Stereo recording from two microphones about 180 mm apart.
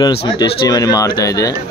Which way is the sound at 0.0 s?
25° left (ahead or behind).